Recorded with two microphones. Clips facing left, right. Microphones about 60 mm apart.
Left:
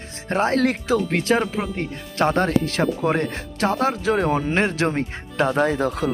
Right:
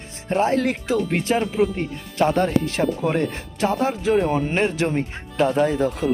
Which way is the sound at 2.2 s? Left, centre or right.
Left.